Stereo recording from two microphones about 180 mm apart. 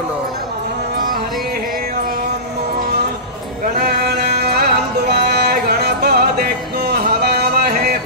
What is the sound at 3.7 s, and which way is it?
Music, 60° right (ahead or behind).